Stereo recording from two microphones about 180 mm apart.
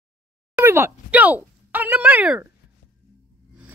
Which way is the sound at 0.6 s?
15° right (ahead or behind).